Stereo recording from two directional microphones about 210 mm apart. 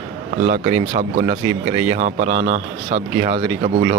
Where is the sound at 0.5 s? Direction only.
35° right (ahead or behind).